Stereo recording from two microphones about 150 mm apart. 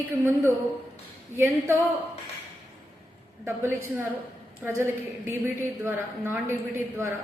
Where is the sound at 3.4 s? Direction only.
15° right (ahead or behind).